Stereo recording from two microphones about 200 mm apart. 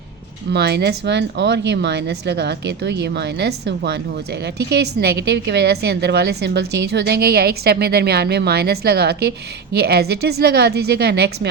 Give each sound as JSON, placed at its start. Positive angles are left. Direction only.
{"t": 0.5, "sound": "a woman's voice", "side_deg": -55}